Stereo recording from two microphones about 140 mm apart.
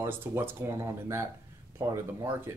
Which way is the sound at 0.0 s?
15° right (ahead or behind).